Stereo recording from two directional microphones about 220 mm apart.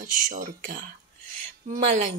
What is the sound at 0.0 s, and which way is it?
A woman's voice, 35° right (ahead or behind).